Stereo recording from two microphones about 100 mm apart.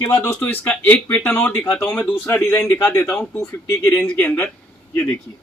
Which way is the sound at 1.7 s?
25° left (ahead or behind).